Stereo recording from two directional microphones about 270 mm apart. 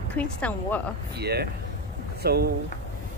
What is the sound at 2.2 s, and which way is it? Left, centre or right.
Speech, right.